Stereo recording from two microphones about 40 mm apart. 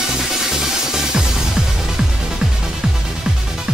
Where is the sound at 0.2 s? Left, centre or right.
Centre.